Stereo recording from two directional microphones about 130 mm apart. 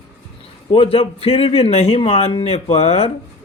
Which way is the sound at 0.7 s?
45° left (ahead or behind).